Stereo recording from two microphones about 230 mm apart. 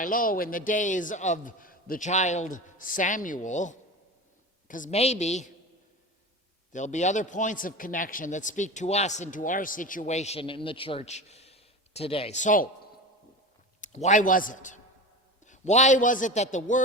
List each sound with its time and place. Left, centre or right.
0.0 s a man's voice: left
6.7 s a man's voice: left
13.8 s a man's voice: left